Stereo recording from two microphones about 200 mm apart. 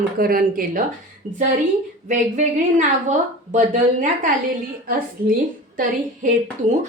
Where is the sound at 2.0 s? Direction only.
35° right (ahead or behind).